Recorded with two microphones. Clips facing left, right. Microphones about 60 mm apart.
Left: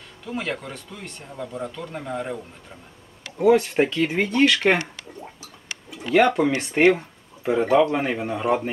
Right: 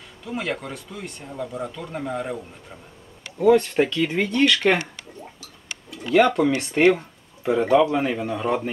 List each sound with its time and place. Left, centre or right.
0.3 s speech: centre
3.3 s speech: centre
6.0 s speech: centre